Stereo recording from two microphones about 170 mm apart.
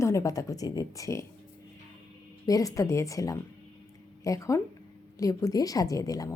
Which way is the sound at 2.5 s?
20° left (ahead or behind).